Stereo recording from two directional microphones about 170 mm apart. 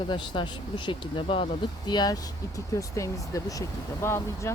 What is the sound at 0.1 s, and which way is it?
Speech, 25° left (ahead or behind).